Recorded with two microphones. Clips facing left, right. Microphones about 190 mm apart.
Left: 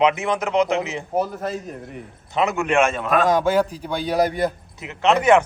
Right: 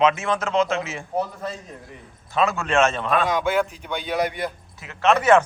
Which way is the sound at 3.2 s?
40° left (ahead or behind).